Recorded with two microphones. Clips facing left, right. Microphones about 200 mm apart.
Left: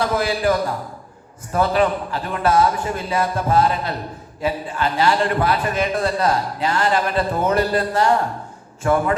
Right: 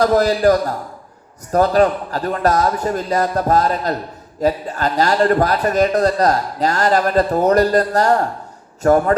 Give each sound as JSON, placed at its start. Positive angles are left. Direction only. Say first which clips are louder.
{"t": 0.0, "sound": "a man's voice", "louder": "right 6 dB", "side_deg": -40}